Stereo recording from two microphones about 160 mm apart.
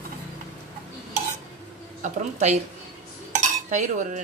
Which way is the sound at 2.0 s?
45° right (ahead or behind).